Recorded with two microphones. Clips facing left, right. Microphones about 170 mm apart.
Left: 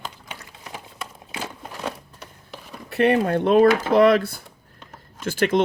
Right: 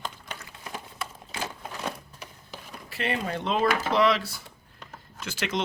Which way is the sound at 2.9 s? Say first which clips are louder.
Left 11 dB; 60° left (ahead or behind).